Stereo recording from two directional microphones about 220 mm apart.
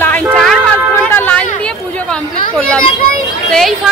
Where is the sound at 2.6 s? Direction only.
5° left (ahead or behind).